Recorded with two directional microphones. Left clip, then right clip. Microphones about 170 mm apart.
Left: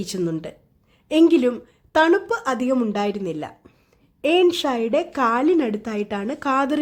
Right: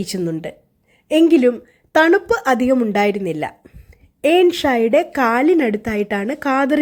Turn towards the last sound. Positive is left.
turn(degrees=-15)  # may be behind; listen again after turning